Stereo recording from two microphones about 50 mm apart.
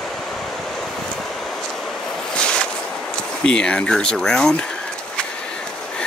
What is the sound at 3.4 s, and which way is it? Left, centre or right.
Speech, centre.